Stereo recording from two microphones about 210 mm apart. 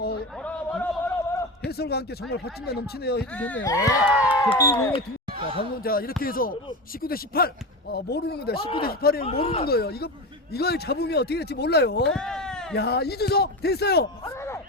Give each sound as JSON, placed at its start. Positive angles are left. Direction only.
{"t": 0.0, "sound": "a sound", "side_deg": 50}
{"t": 0.3, "sound": "a sound", "side_deg": 5}
{"t": 1.6, "sound": "speech", "side_deg": 50}
{"t": 3.3, "sound": "speech", "side_deg": 5}
{"t": 4.0, "sound": "speech", "side_deg": -5}
{"t": 4.3, "sound": "speech", "side_deg": 20}
{"t": 5.5, "sound": "speech", "side_deg": 45}
{"t": 9.2, "sound": "speech", "side_deg": 25}
{"t": 9.6, "sound": "speech", "side_deg": 45}
{"t": 12.1, "sound": "a sound", "side_deg": 5}
{"t": 12.7, "sound": "speech", "side_deg": 50}
{"t": 14.3, "sound": "music", "side_deg": 10}